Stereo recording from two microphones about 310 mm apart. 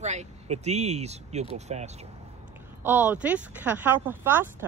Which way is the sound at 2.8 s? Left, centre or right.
Centre.